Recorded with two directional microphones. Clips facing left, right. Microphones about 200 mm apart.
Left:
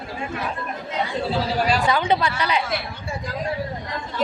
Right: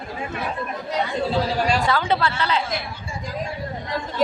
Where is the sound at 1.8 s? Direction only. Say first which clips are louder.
Left 1 dB; 15° left (ahead or behind).